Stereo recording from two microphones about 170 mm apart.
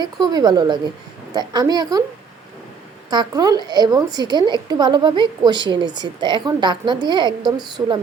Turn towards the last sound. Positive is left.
turn(degrees=-25)  # may be behind; listen again after turning